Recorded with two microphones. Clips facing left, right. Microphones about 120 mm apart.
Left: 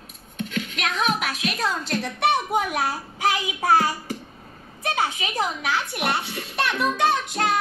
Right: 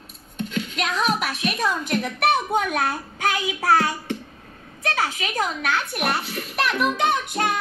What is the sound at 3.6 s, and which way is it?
Child singing, 25° left (ahead or behind).